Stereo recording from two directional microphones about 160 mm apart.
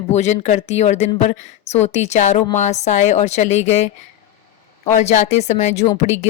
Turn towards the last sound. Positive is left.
turn(degrees=45)  # may be behind; listen again after turning